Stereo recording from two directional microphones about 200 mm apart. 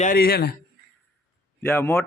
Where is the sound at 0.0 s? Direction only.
45° left (ahead or behind).